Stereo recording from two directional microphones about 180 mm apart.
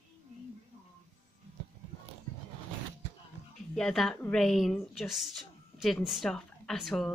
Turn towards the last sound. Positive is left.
turn(degrees=0)  # may be behind; listen again after turning